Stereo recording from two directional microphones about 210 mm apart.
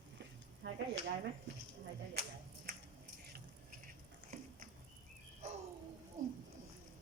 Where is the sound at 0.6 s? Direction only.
60° right (ahead or behind).